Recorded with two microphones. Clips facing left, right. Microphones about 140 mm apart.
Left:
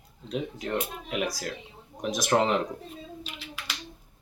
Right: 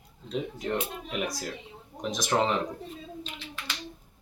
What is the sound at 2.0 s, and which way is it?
Speech, 5° left (ahead or behind).